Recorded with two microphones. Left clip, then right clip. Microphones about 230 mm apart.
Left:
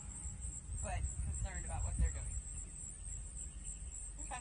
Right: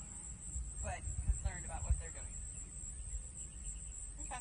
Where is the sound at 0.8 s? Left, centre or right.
Centre.